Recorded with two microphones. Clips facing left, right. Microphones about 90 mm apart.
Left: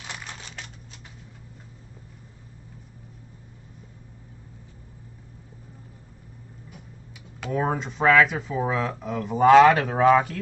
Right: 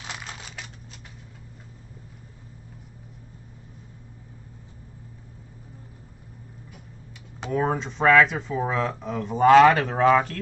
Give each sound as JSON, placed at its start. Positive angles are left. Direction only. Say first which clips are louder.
{"t": 0.0, "sound": "crumpling", "louder": "right 1 dB", "side_deg": -5}
{"t": 7.5, "sound": "speech", "louder": "right 1 dB", "side_deg": 0}